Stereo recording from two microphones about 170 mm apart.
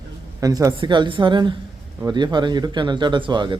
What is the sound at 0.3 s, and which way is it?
Speech, 20° right (ahead or behind).